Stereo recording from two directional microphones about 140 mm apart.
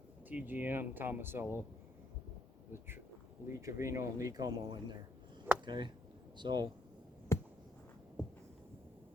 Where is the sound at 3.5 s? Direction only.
20° right (ahead or behind).